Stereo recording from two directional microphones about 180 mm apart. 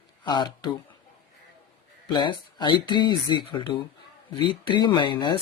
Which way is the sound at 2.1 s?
25° left (ahead or behind).